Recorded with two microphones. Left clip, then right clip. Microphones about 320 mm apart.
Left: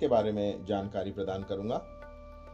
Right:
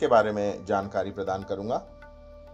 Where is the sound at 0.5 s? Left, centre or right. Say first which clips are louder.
Right 6 dB; centre.